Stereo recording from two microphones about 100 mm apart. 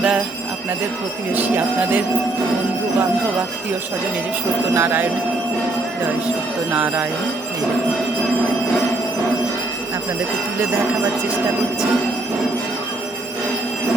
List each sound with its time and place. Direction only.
1.3 s jingle bell: 20° right (ahead or behind)
4.7 s speech: 20° right (ahead or behind)
6.2 s jingle bell: 15° right (ahead or behind)